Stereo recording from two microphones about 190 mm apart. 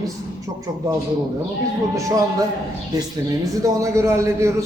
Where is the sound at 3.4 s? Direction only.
15° right (ahead or behind).